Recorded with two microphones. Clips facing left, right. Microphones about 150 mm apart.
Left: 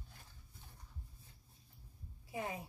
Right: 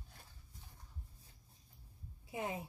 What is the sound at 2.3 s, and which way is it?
Speech, 20° right (ahead or behind).